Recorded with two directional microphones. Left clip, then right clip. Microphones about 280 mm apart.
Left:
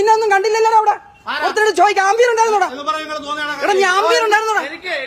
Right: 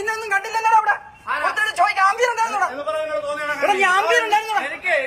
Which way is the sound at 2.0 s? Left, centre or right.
Centre.